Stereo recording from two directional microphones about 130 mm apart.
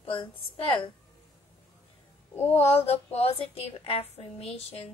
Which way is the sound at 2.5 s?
50° left (ahead or behind).